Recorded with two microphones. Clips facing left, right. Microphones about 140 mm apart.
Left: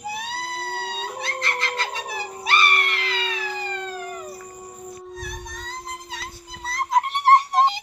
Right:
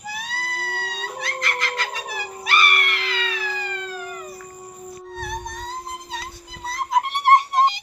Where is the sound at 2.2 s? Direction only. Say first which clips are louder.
Even; centre (ahead or behind).